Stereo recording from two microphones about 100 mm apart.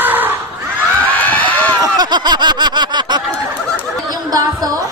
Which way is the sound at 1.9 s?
45° right (ahead or behind).